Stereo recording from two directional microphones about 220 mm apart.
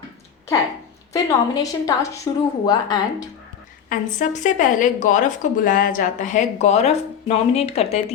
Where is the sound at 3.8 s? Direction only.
35° left (ahead or behind).